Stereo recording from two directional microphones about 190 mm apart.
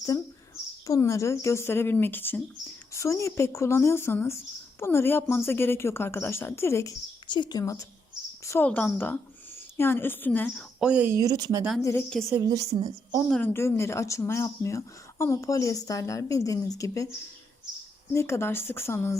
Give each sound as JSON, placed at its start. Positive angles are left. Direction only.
{"t": 0.9, "sound": "speech", "side_deg": 15}
{"t": 10.8, "sound": "speech", "side_deg": -5}
{"t": 11.8, "sound": "speech", "side_deg": 15}
{"t": 12.3, "sound": "a woman's voice", "side_deg": -20}
{"t": 13.2, "sound": "speech", "side_deg": 5}
{"t": 18.1, "sound": "speech", "side_deg": 15}